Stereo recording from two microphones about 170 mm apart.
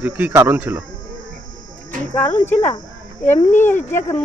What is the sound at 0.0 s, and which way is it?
Speech, 10° right (ahead or behind).